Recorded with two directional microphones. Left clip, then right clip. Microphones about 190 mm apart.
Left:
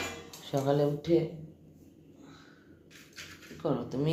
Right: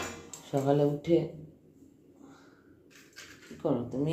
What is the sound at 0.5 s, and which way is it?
Speech, 15° right (ahead or behind).